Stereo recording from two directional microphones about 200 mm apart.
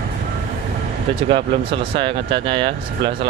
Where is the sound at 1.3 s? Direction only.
25° right (ahead or behind).